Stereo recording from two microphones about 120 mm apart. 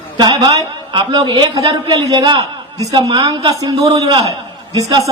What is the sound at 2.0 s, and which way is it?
A woman's voice, 35° right (ahead or behind).